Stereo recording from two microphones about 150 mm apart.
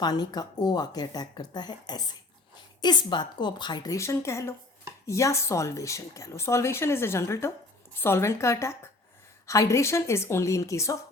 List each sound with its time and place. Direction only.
0.0 s speech: 25° left (ahead or behind)